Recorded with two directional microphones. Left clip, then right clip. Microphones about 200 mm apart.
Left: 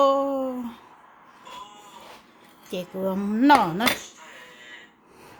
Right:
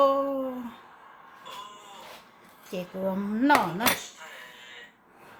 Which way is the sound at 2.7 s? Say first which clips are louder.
Left 3 dB; 40° left (ahead or behind).